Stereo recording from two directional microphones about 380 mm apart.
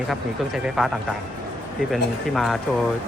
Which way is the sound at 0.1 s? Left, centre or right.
Centre.